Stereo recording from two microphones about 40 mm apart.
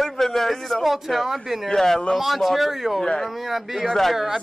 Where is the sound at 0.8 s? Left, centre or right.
Centre.